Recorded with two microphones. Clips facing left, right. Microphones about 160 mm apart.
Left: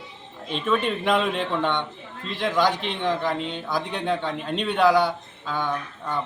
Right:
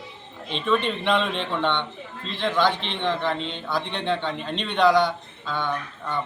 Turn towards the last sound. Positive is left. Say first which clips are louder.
# even
turn(degrees=10)  # may be behind; listen again after turning